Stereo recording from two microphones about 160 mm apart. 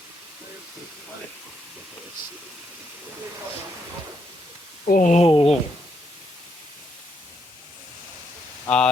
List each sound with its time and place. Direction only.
4.9 s speech: 55° left (ahead or behind)
5.2 s speech: 35° left (ahead or behind)
8.6 s speech: 5° left (ahead or behind)